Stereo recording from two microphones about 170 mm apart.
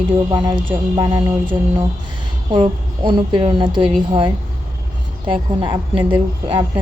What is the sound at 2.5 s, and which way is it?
Speech, 25° right (ahead or behind).